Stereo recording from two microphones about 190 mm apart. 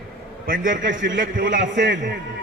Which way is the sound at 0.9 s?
75° right (ahead or behind).